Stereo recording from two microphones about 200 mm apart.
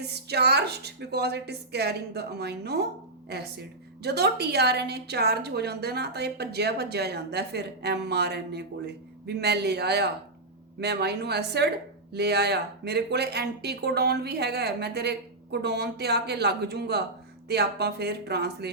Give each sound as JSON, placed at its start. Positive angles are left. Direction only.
{"t": 0.0, "sound": "a woman's voice", "side_deg": -55}